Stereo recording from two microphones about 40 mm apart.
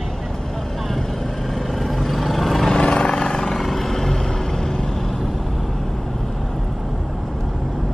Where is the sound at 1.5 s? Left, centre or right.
Centre.